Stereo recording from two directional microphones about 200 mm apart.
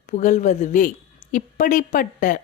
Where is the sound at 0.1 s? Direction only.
35° left (ahead or behind).